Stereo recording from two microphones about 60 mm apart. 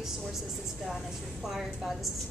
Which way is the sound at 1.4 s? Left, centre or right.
Centre.